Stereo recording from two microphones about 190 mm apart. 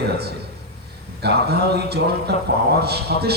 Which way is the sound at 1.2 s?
60° right (ahead or behind).